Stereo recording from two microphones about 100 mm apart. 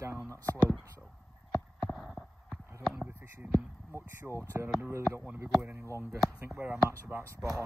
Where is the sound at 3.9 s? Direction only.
25° right (ahead or behind).